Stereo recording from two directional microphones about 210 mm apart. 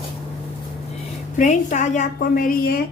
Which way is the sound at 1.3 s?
35° left (ahead or behind).